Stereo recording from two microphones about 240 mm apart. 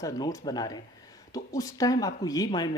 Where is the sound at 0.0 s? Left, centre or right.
Centre.